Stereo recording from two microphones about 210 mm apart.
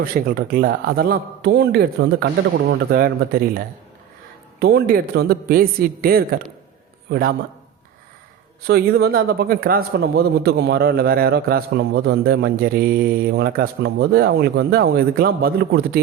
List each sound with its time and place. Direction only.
0.0 s speech: 45° right (ahead or behind)
4.6 s speech: 50° right (ahead or behind)
8.6 s speech: 50° right (ahead or behind)